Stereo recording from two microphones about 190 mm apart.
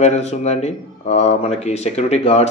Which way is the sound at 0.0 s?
35° left (ahead or behind).